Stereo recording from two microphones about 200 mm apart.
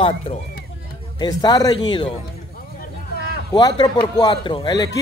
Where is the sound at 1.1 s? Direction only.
20° left (ahead or behind).